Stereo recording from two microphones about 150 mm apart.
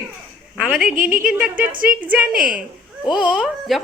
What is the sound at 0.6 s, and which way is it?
A woman's voice, 5° right (ahead or behind).